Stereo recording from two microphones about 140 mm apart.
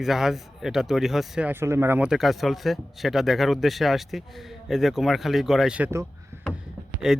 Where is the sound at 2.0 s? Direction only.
Centre (ahead or behind).